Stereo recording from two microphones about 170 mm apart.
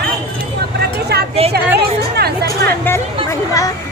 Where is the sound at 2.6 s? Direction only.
15° left (ahead or behind).